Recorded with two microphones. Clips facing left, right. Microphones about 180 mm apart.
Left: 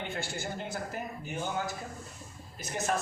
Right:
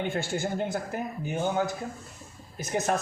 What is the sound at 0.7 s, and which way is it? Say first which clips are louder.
Speech: right 5 dB; 55° right (ahead or behind).